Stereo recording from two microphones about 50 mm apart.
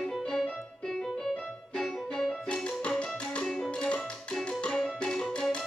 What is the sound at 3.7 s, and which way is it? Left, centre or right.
Music, left.